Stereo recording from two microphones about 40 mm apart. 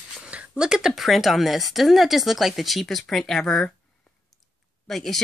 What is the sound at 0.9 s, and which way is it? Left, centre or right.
A woman's voice, centre.